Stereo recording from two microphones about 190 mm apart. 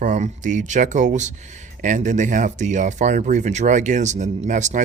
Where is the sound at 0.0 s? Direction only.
40° right (ahead or behind).